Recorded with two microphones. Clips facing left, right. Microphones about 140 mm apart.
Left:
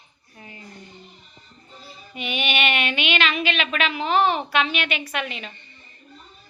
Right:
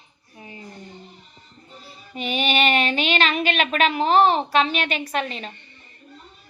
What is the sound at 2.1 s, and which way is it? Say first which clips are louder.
Child singing: right 4 dB; 40° right (ahead or behind).